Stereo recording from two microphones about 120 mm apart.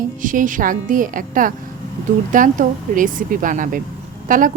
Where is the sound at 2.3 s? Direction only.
90° right.